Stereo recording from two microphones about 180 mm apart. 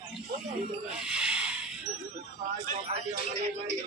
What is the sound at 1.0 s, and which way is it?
Snake, 5° right (ahead or behind).